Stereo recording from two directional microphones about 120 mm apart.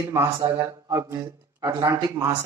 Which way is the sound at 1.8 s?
30° right (ahead or behind).